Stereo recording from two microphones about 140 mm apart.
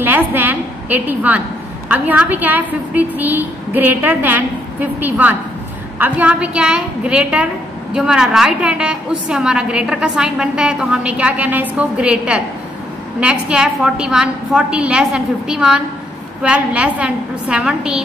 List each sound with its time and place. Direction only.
0.0 s a woman's voice: 15° right (ahead or behind)